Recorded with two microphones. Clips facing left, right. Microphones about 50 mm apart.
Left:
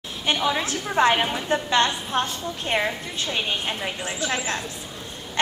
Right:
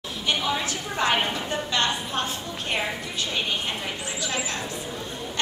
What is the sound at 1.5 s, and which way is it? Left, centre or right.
Speech, left.